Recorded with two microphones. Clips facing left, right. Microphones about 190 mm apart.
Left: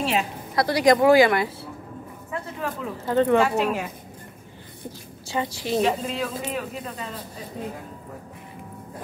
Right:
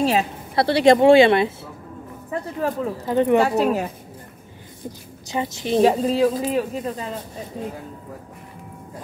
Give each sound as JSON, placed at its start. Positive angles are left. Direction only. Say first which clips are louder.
{"t": 0.0, "sound": "a woman's voice", "louder": "right 5 dB", "side_deg": -35}
{"t": 2.3, "sound": "a sound", "louder": "right 6 dB", "side_deg": -40}
{"t": 3.1, "sound": "speech", "louder": "right 1 dB", "side_deg": -15}
{"t": 3.3, "sound": "speech", "louder": "right 3 dB", "side_deg": -40}
{"t": 5.3, "sound": "a woman's voice", "louder": "right 3 dB", "side_deg": -20}
{"t": 5.8, "sound": "speech", "louder": "right 8 dB", "side_deg": -40}